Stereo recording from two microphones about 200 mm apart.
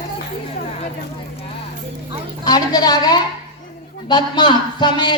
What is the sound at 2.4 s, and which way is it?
A woman's voice, 20° left (ahead or behind).